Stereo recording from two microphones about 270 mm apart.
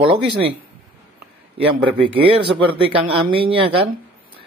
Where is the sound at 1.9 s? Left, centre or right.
Centre.